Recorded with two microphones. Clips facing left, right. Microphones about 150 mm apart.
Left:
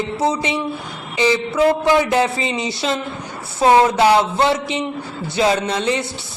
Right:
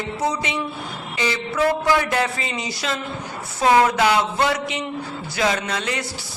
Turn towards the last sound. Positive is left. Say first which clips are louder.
# left 6 dB
turn(degrees=25)  # may be behind; listen again after turning